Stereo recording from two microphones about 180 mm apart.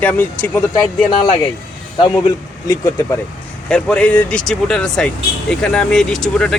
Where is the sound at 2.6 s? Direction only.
20° left (ahead or behind).